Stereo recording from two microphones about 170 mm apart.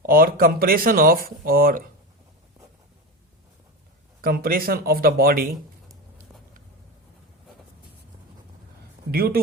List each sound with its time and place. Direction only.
0.0 s speech: 60° right (ahead or behind)
4.2 s speech: 60° right (ahead or behind)
9.1 s speech: 65° right (ahead or behind)